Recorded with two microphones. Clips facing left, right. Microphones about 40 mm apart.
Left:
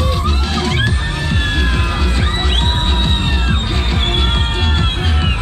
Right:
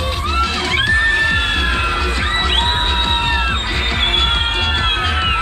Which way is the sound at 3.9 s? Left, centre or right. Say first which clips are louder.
Right 2 dB; right.